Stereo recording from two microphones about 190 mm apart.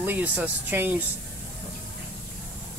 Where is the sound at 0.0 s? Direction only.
10° right (ahead or behind).